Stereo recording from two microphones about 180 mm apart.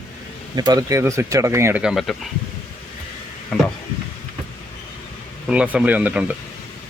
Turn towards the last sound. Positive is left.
turn(degrees=-10)  # may be behind; listen again after turning